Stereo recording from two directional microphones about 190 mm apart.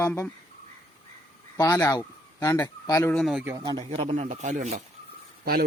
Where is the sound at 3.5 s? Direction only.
20° right (ahead or behind); by 4.8 s 40° right (ahead or behind).